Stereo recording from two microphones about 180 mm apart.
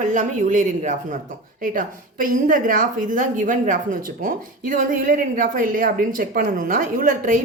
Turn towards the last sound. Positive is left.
turn(degrees=-50)  # may be behind; listen again after turning